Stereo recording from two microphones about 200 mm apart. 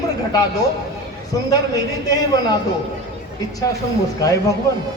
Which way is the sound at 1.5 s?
20° left (ahead or behind).